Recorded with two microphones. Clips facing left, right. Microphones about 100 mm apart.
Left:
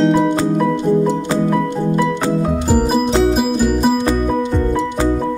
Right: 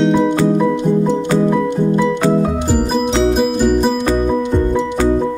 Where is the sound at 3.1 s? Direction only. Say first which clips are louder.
Even; centre (ahead or behind).